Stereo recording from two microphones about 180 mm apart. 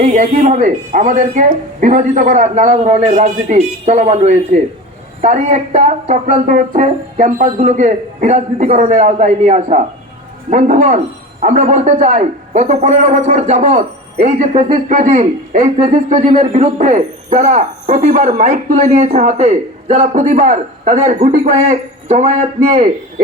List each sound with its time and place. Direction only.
0.0 s a man's voice: 45° right (ahead or behind)